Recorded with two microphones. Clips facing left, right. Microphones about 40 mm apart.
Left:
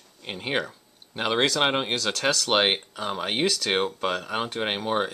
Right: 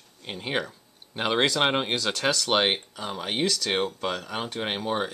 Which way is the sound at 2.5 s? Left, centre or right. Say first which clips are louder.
Left 2 dB; centre.